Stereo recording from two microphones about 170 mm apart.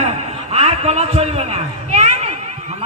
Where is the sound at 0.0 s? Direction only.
35° right (ahead or behind).